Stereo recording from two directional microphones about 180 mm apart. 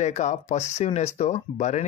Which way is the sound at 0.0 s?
40° left (ahead or behind).